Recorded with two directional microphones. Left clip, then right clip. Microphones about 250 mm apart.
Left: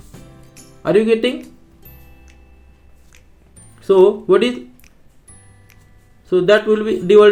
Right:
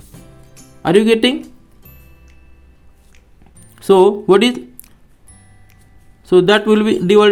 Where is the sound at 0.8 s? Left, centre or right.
Right.